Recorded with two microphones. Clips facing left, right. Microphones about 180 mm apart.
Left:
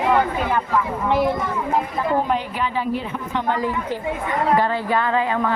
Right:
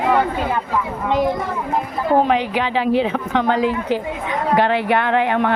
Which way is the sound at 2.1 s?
85° right.